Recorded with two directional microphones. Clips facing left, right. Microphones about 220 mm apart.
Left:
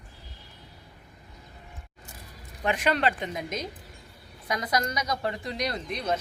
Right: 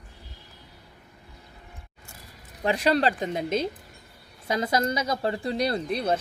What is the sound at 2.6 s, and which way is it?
Speech, 35° right (ahead or behind).